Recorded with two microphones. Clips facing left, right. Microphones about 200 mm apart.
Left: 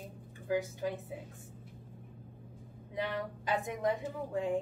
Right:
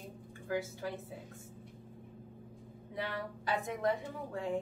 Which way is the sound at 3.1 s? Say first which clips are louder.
Even; 15° left (ahead or behind).